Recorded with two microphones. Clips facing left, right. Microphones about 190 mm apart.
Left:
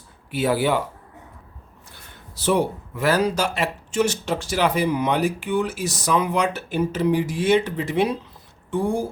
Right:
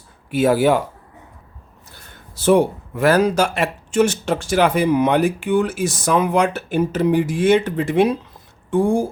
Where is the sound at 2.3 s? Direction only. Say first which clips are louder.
Right 6 dB; 50° right (ahead or behind).